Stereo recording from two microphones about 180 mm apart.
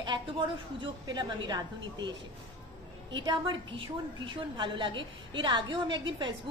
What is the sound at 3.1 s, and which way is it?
A woman's voice, 25° right (ahead or behind).